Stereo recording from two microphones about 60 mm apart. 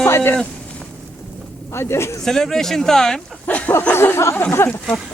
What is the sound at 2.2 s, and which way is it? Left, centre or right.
Speech, centre.